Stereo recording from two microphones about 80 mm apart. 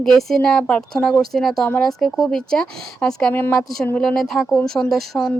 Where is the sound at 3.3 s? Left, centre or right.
Left.